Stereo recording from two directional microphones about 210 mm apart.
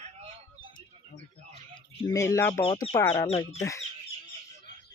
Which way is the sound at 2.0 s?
15° left (ahead or behind).